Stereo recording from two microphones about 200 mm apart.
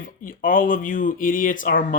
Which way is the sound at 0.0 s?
45° left (ahead or behind).